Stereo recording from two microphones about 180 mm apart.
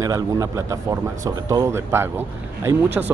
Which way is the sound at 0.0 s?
20° right (ahead or behind).